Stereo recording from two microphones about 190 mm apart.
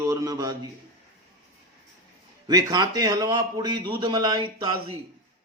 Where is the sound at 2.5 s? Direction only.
20° right (ahead or behind).